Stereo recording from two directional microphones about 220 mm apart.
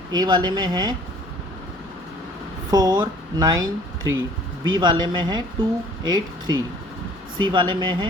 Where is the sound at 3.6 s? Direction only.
60° right (ahead or behind).